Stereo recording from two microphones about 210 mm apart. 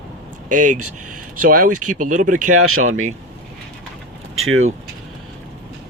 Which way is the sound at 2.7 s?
80° right.